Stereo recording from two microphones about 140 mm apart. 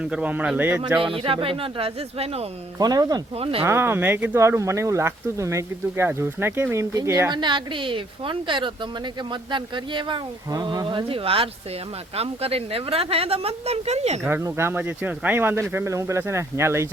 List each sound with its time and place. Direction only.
0.0 s speech: 10° right (ahead or behind)
1.1 s speech: 40° right (ahead or behind)
2.7 s speech: 25° right (ahead or behind)
3.3 s a woman's voice: 45° right (ahead or behind)
3.6 s a woman's voice: 15° right (ahead or behind); by 14.2 s 50° right (ahead or behind)
14.4 s speech: 15° right (ahead or behind)